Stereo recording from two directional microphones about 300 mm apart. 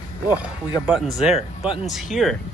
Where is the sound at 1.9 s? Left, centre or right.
Centre.